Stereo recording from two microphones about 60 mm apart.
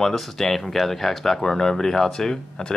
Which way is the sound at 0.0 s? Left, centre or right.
Centre.